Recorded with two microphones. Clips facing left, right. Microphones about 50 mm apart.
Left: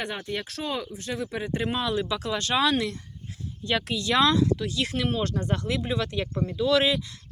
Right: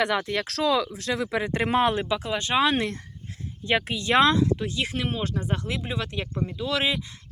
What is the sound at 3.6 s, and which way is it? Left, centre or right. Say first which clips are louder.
Speech: right 2 dB; right.